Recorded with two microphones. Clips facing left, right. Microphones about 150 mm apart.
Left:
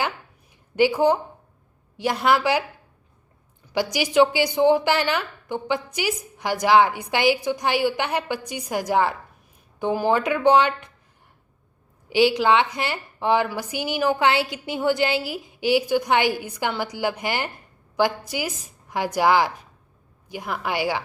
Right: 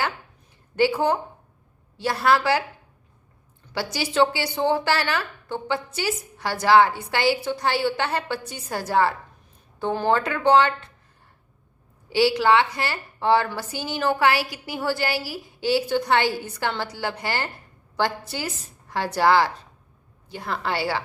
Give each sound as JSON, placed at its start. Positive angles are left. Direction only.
{"t": 0.8, "sound": "a woman's voice", "side_deg": 15}
{"t": 3.9, "sound": "a woman's voice", "side_deg": 15}
{"t": 12.0, "sound": "a woman's voice", "side_deg": 15}